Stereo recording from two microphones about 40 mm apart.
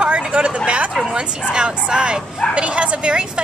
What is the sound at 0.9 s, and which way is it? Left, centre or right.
A woman's voice, right.